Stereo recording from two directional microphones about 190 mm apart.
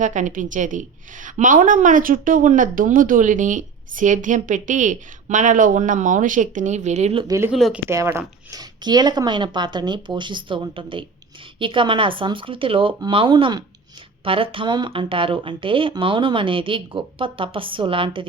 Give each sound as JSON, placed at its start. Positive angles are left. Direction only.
{"t": 0.0, "sound": "a woman's voice", "side_deg": -40}
{"t": 7.5, "sound": "speech", "side_deg": 0}
{"t": 7.9, "sound": "speech", "side_deg": -15}